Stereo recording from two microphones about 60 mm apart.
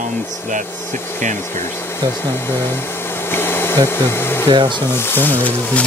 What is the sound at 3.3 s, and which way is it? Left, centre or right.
Hair dryer, left.